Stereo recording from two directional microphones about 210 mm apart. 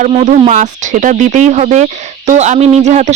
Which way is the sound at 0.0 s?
35° right (ahead or behind).